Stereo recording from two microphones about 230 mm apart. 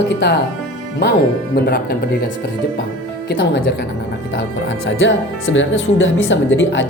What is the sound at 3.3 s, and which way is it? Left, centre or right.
Speech, left.